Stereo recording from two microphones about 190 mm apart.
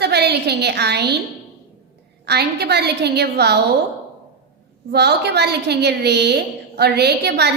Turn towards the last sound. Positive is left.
turn(degrees=-60)  # may be behind; listen again after turning